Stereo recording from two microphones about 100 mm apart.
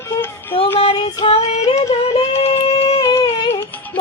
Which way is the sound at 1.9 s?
90° left.